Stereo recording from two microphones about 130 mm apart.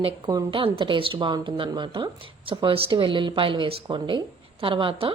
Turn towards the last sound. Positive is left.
turn(degrees=-45)  # may be behind; listen again after turning